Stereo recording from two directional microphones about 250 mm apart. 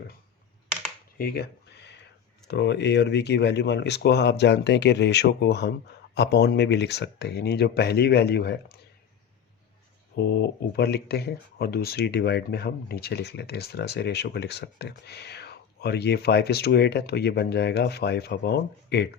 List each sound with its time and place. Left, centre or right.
1.2 s a sound: left
2.5 s speech: left
10.2 s speech: left